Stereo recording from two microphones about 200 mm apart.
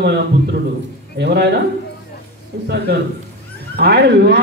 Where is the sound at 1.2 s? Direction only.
55° right (ahead or behind).